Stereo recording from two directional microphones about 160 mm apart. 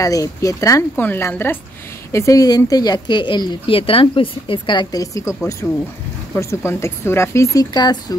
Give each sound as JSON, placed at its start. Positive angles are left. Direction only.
{"t": 0.0, "sound": "speech", "side_deg": 20}
{"t": 5.6, "sound": "speech", "side_deg": 0}
{"t": 6.3, "sound": "speech", "side_deg": 15}